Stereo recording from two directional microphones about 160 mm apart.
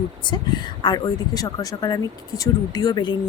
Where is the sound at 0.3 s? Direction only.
30° left (ahead or behind).